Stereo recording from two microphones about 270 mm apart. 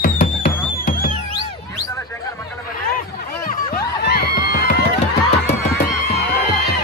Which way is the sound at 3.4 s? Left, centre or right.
Left.